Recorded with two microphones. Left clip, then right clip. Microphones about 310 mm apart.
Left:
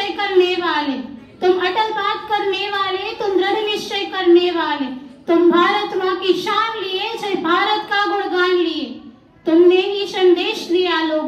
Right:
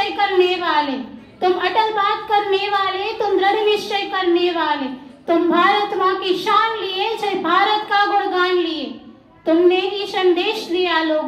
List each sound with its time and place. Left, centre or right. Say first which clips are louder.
0.2 s a sound: left 1 dB; right
5.3 s child singing: left 1 dB; right
9.5 s a woman's voice: left 2 dB; right